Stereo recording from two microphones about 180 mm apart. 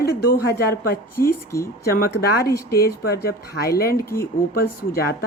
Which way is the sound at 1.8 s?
55° left (ahead or behind).